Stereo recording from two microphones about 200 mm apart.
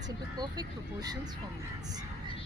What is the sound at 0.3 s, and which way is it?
Speech, 20° right (ahead or behind).